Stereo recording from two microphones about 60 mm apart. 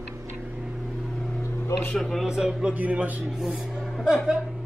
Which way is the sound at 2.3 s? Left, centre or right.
Centre.